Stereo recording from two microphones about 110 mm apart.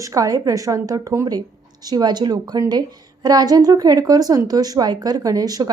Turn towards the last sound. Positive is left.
turn(degrees=-35)  # may be behind; listen again after turning